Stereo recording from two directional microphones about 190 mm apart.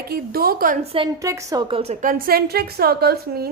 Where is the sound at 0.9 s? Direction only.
30° right (ahead or behind).